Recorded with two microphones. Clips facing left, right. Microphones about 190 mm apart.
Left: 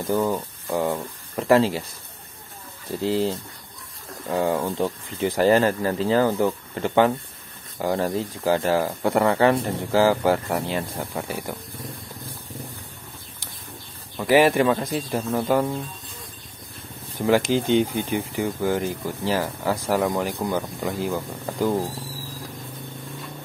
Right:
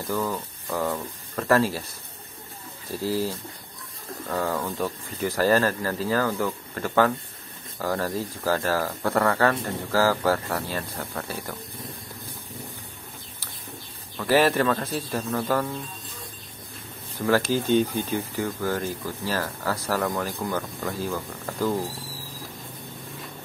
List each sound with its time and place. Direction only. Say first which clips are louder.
0.0 s speech: left 5 dB; 25° left (ahead or behind)
3.0 s speech: left 4 dB; 20° left (ahead or behind)
14.1 s speech: left 3 dB; 15° left (ahead or behind)
17.3 s speech: left 2 dB; 15° left (ahead or behind)